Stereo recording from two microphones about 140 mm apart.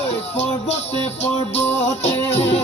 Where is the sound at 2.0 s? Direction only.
50° left (ahead or behind).